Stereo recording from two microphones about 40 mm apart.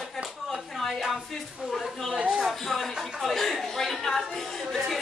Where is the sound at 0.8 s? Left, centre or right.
Centre.